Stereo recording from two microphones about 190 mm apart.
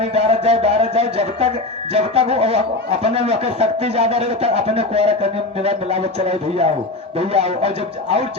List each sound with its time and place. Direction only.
0.0 s speech: 30° right (ahead or behind)